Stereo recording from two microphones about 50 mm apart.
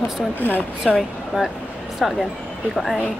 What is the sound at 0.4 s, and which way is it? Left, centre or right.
Speech, left.